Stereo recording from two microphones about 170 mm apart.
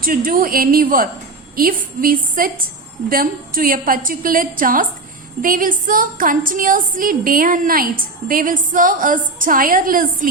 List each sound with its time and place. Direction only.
0.0 s a woman's voice: 55° right (ahead or behind)